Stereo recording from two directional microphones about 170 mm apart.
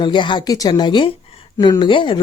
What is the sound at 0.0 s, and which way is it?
Speech, 25° left (ahead or behind).